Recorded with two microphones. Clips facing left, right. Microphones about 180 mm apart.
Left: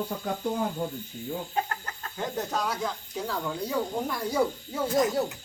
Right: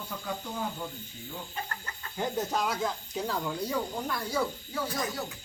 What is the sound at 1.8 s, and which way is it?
Chicken, 55° left (ahead or behind).